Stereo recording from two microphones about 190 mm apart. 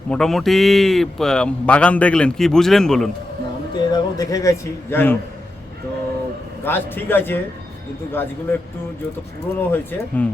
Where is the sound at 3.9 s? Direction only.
20° left (ahead or behind).